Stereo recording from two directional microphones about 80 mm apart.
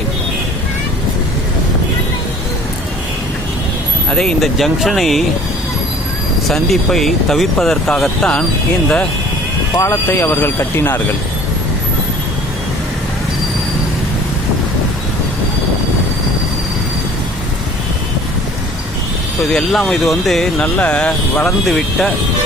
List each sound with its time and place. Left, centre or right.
4.1 s speech: centre
4.4 s speech: centre
6.5 s speech: centre
10.1 s speech: left
19.5 s speech: centre
20.6 s speech: centre